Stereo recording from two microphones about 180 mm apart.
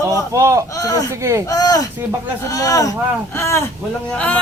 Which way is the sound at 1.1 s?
15° right (ahead or behind).